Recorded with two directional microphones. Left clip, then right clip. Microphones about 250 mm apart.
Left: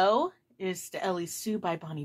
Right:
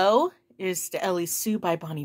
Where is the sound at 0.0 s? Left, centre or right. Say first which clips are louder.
Right 4 dB; right.